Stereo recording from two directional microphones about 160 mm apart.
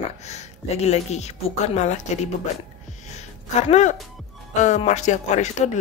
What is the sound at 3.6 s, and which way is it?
Speech, 45° left (ahead or behind).